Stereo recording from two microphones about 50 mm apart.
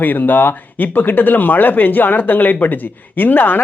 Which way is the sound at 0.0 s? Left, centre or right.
Left.